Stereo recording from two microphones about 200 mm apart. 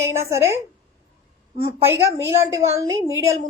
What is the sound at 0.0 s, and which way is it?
A woman's voice, 15° right (ahead or behind).